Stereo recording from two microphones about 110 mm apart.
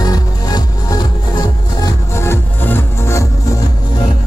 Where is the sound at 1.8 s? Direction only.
25° left (ahead or behind).